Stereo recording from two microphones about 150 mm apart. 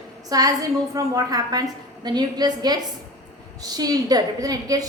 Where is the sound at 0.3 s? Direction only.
25° right (ahead or behind).